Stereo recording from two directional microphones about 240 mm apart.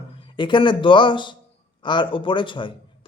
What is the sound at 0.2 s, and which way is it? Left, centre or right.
A man's voice, centre.